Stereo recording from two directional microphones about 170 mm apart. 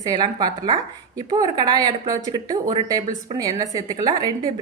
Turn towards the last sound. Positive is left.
turn(degrees=-20)  # may be behind; listen again after turning